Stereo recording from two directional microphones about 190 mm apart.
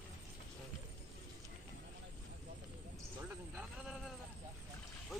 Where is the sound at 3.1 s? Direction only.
5° right (ahead or behind).